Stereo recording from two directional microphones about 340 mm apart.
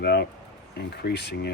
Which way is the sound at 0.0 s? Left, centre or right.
Left.